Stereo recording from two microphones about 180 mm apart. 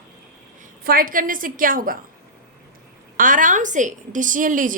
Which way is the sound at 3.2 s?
50° right (ahead or behind).